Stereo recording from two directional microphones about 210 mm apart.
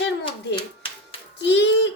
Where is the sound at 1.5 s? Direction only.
55° left (ahead or behind).